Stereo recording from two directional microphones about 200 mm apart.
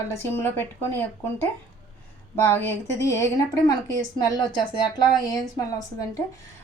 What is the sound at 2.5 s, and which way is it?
A woman's voice, 10° left (ahead or behind).